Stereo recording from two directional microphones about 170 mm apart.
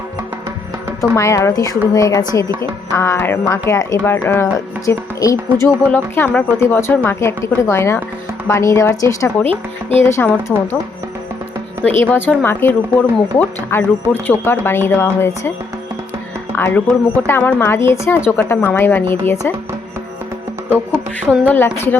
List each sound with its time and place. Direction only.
1.1 s speech: 15° left (ahead or behind)
11.9 s speech: 15° left (ahead or behind)
16.6 s speech: 10° left (ahead or behind)
20.9 s speech: 10° right (ahead or behind)
21.5 s speech: 10° left (ahead or behind)